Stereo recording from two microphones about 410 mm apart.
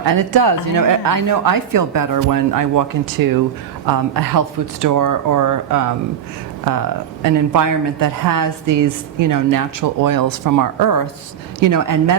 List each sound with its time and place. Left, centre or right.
0.1 s a woman's voice: right
3.9 s a woman's voice: right